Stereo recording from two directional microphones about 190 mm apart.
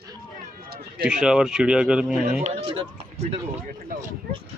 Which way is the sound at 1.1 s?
5° right (ahead or behind).